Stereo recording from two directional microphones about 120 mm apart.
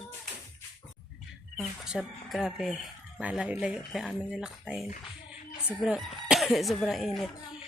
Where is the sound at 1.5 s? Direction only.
5° right (ahead or behind).